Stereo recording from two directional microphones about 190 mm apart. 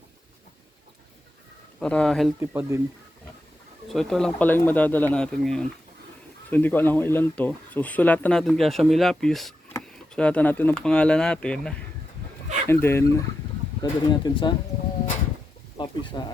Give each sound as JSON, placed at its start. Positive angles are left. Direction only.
{"t": 1.8, "sound": "speech", "side_deg": 5}
{"t": 2.4, "sound": "speech", "side_deg": -10}
{"t": 3.8, "sound": "speech", "side_deg": 0}
{"t": 15.8, "sound": "speech", "side_deg": 25}